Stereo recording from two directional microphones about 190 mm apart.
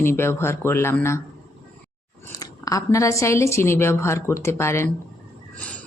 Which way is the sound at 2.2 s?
20° left (ahead or behind).